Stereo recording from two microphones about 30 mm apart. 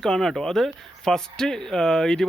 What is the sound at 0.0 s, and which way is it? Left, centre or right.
Speech, centre.